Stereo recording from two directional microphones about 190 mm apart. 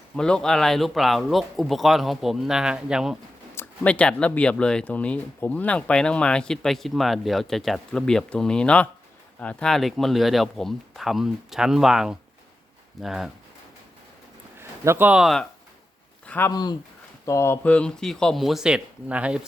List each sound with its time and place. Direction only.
0.2 s speech: 5° left (ahead or behind)
3.5 s speech: 10° left (ahead or behind)
14.6 s speech: 10° right (ahead or behind)
16.2 s a sound: 10° left (ahead or behind)
16.5 s speech: 20° left (ahead or behind); by 19.5 s 5° right (ahead or behind)